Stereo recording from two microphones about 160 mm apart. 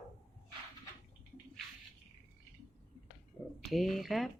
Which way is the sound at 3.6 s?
Centre (ahead or behind).